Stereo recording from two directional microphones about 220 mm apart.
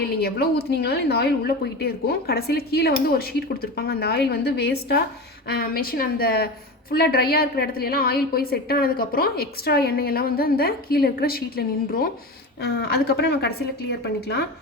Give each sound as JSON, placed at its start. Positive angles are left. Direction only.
{"t": 0.0, "sound": "a woman's voice", "side_deg": 45}